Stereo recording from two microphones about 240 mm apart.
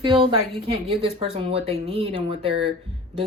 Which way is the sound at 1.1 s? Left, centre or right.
Right.